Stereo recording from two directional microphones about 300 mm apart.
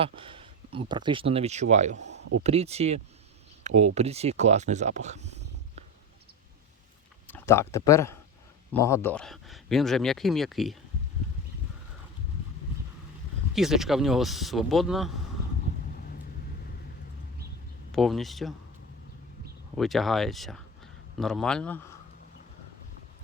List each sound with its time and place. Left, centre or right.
0.0 s speech: centre
2.0 s a sound: right
2.4 s speech: right
7.3 s speech: centre
13.5 s speech: centre
17.9 s speech: centre
19.7 s speech: centre